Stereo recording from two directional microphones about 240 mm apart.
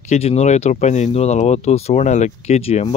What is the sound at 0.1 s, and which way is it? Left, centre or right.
Speech, left.